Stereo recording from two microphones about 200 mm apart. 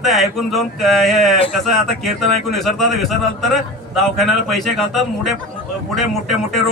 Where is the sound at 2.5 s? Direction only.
Centre (ahead or behind).